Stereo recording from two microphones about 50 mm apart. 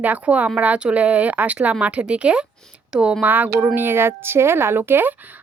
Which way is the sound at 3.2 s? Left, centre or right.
Right.